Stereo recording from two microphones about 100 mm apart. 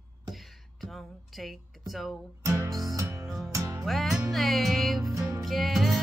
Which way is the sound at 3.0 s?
30° right (ahead or behind).